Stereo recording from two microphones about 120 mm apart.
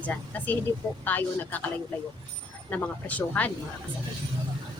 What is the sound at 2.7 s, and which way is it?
Speech, 10° left (ahead or behind).